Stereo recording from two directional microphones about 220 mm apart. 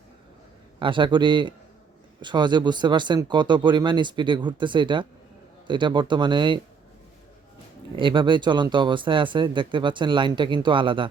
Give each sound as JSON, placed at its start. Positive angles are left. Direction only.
{"t": 0.8, "sound": "speech", "side_deg": -20}
{"t": 7.9, "sound": "speech", "side_deg": -20}